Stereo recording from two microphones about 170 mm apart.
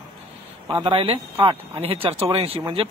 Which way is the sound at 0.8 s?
35° right (ahead or behind).